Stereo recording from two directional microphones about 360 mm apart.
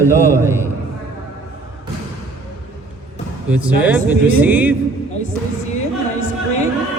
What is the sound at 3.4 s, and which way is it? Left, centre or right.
Speech, centre.